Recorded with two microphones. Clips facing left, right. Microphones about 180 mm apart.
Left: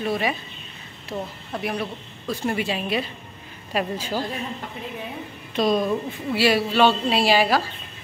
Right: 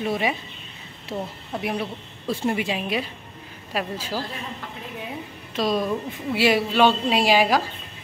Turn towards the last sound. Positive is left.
turn(degrees=-15)  # may be behind; listen again after turning